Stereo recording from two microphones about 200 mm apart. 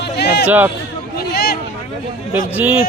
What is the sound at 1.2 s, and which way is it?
Speech, 50° left (ahead or behind).